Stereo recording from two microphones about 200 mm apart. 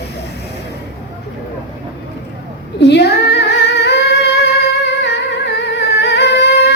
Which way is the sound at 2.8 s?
55° left (ahead or behind).